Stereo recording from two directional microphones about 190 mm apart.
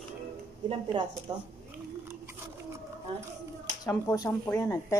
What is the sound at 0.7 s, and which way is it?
Speech, 25° right (ahead or behind).